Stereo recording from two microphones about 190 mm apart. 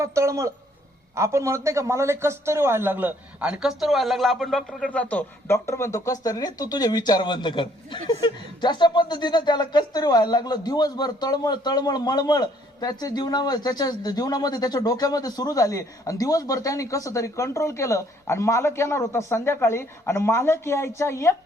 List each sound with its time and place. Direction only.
0.0 s a man's voice: 15° right (ahead or behind); by 21.3 s 15° left (ahead or behind)